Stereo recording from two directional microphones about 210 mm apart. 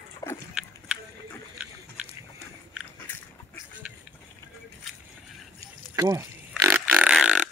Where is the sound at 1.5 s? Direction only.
5° right (ahead or behind).